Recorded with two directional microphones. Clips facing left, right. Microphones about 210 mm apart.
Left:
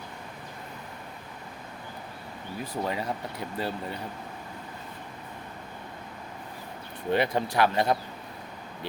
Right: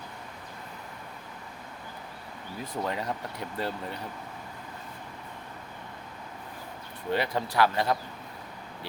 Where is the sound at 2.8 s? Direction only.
5° left (ahead or behind).